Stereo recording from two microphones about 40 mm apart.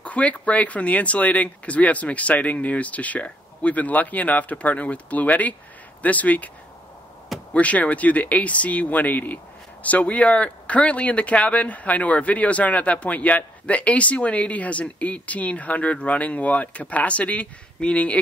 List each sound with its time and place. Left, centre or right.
0.0 s speech: left
7.5 s speech: left